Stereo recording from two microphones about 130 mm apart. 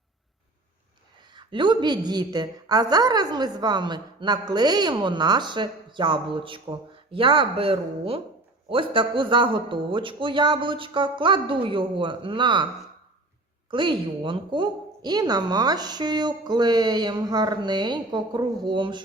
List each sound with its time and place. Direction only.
1.3 s a woman's voice: 35° right (ahead or behind)
13.7 s a woman's voice: 40° right (ahead or behind)